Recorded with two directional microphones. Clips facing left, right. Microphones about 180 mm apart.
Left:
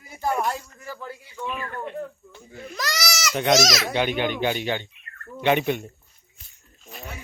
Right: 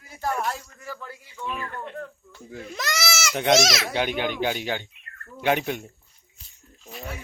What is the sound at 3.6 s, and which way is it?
Speech, 25° right (ahead or behind).